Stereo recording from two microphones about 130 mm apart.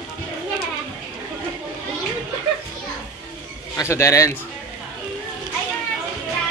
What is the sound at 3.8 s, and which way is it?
Speech, 20° left (ahead or behind).